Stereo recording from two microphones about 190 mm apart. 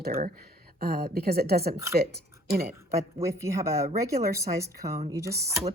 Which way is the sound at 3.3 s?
15° right (ahead or behind).